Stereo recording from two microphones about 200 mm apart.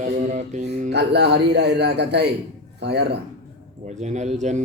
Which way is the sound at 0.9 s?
55° right (ahead or behind).